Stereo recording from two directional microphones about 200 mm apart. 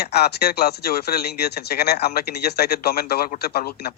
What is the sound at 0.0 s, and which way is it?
Speech, 55° left (ahead or behind).